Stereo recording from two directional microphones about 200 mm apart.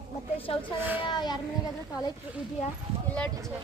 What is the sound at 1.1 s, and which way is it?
Speech, 20° left (ahead or behind).